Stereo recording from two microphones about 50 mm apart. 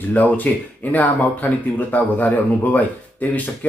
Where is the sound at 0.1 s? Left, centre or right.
Left.